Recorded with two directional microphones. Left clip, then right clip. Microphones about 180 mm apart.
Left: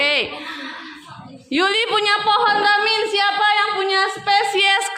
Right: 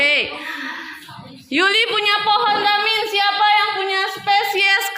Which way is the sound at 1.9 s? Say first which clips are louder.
Even; 30° left (ahead or behind).